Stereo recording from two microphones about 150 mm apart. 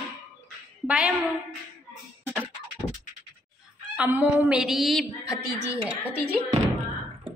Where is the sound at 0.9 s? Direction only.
10° right (ahead or behind).